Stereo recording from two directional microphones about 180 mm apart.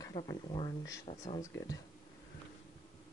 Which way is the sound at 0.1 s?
30° left (ahead or behind).